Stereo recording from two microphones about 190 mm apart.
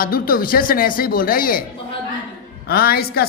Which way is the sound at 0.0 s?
50° left (ahead or behind).